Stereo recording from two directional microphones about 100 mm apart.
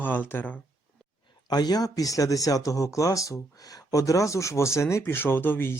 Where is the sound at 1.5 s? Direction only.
40° left (ahead or behind); by 5.8 s 20° left (ahead or behind).